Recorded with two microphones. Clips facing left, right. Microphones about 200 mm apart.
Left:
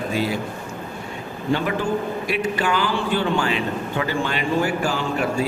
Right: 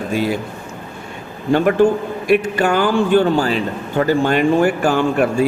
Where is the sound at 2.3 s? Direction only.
50° right (ahead or behind).